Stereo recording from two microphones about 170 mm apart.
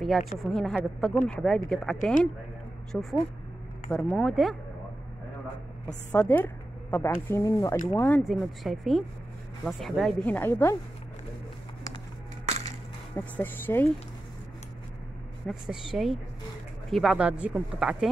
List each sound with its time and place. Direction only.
0.4 s speech: centre (ahead or behind)
6.1 s speech: 10° left (ahead or behind)
8.2 s speech: centre (ahead or behind)
12.4 s crushing: 40° right (ahead or behind)
13.1 s speech: 10° left (ahead or behind)
15.4 s speech: 5° right (ahead or behind)